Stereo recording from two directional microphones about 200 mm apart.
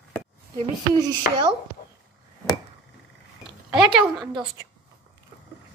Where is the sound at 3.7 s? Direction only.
5° right (ahead or behind).